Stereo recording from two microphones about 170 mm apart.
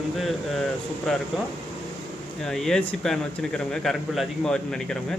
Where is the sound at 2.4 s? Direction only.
Centre (ahead or behind).